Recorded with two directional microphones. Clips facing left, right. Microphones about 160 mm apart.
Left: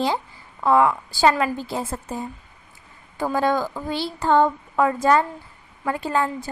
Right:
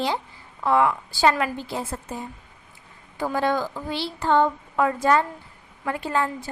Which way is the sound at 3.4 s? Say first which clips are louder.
Left 2 dB; 45° left (ahead or behind).